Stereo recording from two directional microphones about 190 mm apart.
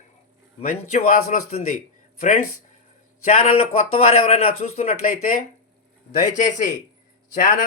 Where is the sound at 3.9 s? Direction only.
35° left (ahead or behind).